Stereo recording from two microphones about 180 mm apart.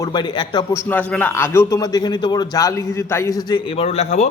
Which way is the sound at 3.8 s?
40° left (ahead or behind).